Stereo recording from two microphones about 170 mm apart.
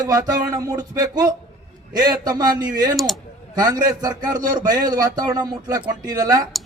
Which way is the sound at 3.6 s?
20° right (ahead or behind).